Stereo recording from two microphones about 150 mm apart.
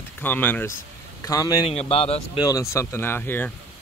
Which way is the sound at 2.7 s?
20° left (ahead or behind).